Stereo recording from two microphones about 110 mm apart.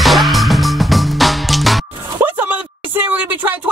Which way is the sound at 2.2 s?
15° right (ahead or behind).